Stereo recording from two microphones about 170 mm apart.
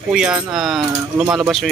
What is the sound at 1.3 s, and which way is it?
Speech, centre (ahead or behind).